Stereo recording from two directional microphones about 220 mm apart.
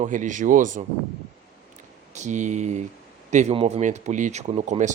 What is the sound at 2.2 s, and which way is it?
Speech, 35° right (ahead or behind).